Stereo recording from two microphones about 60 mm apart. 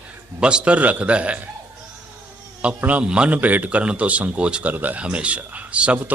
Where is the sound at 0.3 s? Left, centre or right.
Centre.